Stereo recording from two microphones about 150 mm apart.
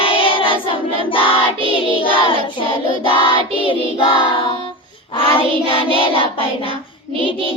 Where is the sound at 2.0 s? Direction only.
35° left (ahead or behind).